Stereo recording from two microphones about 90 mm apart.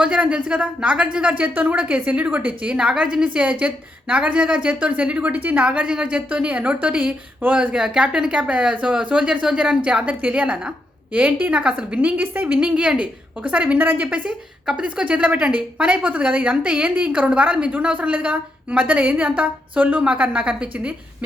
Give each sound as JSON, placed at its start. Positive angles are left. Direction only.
{"t": 0.0, "sound": "speech", "side_deg": -15}